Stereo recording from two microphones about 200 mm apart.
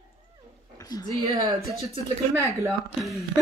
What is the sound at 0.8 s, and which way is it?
Speech, 20° left (ahead or behind).